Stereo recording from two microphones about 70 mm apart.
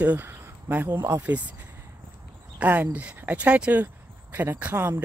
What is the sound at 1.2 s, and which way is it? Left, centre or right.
Speech, centre.